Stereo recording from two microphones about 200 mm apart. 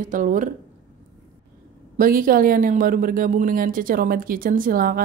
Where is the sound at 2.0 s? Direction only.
45° right (ahead or behind).